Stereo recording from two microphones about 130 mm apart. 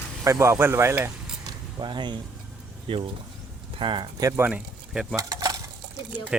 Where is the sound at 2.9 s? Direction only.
40° right (ahead or behind).